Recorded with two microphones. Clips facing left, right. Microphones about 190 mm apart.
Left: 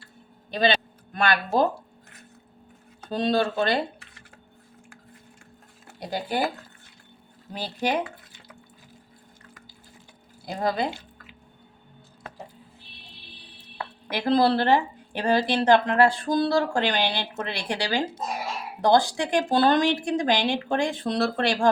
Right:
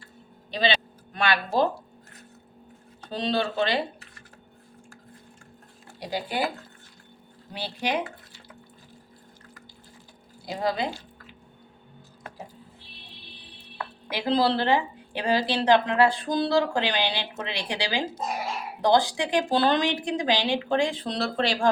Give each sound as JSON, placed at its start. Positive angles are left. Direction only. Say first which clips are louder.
{"t": 0.5, "sound": "a sound", "louder": "left 3 dB", "side_deg": 45}
{"t": 3.1, "sound": "a woman's voice", "louder": "left 3 dB", "side_deg": 50}
{"t": 6.0, "sound": "speech", "louder": "left 2 dB", "side_deg": 50}
{"t": 7.5, "sound": "a woman's voice", "louder": "left 2 dB", "side_deg": 45}
{"t": 10.4, "sound": "a woman's voice", "louder": "left 1 dB", "side_deg": 50}
{"t": 14.1, "sound": "a woman's voice", "louder": "left 3 dB", "side_deg": 50}